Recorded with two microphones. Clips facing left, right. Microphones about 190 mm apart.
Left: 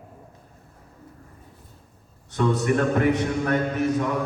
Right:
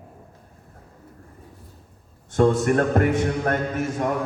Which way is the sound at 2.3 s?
50° right (ahead or behind).